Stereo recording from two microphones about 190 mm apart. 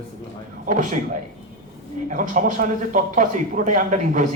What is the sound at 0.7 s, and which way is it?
Speech, 45° right (ahead or behind).